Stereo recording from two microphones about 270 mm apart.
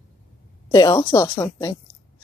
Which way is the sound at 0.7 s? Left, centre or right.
Centre.